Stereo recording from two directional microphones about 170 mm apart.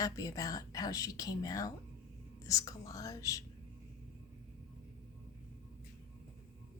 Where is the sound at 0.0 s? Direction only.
20° left (ahead or behind).